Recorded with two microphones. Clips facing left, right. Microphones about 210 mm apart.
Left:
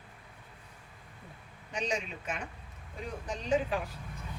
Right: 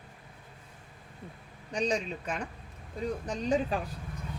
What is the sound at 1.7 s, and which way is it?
A man's voice, 35° right (ahead or behind).